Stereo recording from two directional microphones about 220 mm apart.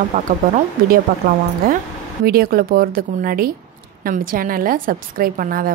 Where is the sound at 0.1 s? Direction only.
35° right (ahead or behind).